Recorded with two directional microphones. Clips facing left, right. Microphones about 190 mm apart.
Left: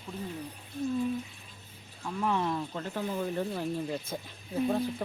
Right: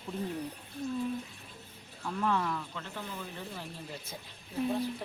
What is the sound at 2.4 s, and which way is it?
Speech, 35° left (ahead or behind).